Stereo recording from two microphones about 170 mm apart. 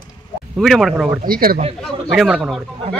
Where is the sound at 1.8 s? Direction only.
Centre (ahead or behind).